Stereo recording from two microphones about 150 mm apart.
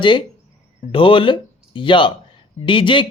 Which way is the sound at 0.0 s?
30° left (ahead or behind).